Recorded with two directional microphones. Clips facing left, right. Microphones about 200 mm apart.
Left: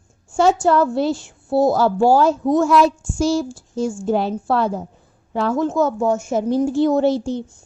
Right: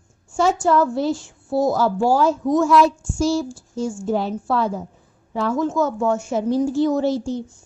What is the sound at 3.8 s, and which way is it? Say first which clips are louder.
A woman's voice: left 3 dB; 70° left (ahead or behind).